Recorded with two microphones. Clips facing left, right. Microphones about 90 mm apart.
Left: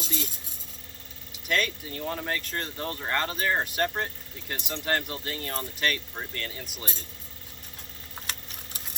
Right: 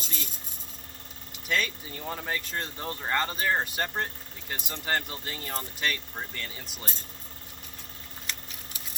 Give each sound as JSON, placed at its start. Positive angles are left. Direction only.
{"t": 1.5, "sound": "speech", "side_deg": 0}